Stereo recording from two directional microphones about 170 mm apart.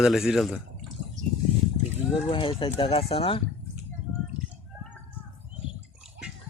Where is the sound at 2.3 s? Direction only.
30° left (ahead or behind).